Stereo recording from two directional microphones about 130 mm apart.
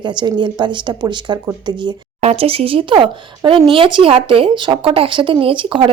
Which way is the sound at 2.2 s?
50° right (ahead or behind).